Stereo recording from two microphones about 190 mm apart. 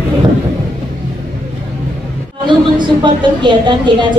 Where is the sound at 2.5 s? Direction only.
25° right (ahead or behind).